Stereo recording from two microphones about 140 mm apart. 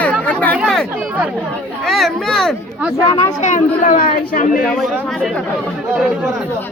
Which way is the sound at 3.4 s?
65° left (ahead or behind).